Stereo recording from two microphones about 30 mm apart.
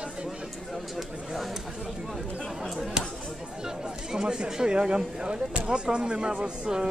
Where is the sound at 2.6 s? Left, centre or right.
Centre; by 6.5 s right.